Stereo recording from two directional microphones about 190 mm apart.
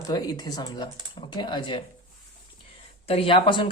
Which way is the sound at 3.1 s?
30° left (ahead or behind).